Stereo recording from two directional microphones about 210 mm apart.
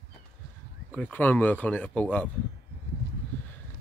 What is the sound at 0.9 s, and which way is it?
Speech, 5° left (ahead or behind).